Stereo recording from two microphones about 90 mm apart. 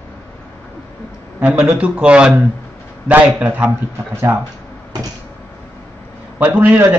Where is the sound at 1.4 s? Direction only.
15° right (ahead or behind).